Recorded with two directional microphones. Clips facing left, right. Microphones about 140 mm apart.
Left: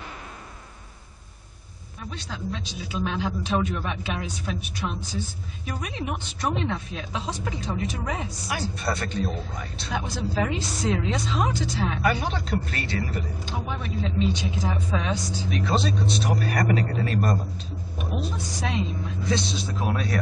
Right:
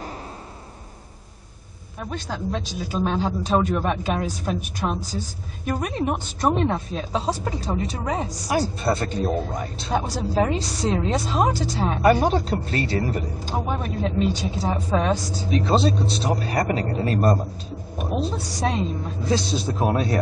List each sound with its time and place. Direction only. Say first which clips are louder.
2.0 s a woman's voice: right 6 dB; 50° right (ahead or behind)
12.4 s speech: right 5 dB; 30° right (ahead or behind)
15.5 s speech: right 6 dB; 30° right (ahead or behind)